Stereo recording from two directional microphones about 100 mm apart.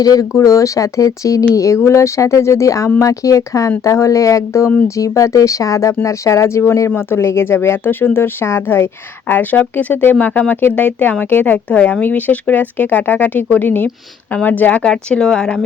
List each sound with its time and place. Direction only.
0.0 s speech: 35° left (ahead or behind); by 15.6 s 10° left (ahead or behind)